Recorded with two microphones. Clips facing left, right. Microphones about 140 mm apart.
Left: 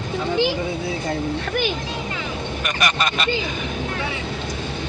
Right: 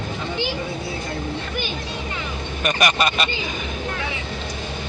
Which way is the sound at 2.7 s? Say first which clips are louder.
Right 4 dB; 20° right (ahead or behind).